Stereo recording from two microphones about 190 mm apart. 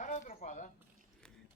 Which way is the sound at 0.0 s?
40° left (ahead or behind).